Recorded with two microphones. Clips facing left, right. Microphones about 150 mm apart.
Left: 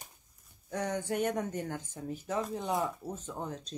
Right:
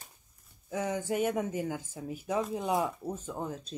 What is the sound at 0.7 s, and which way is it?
Speech, 5° right (ahead or behind).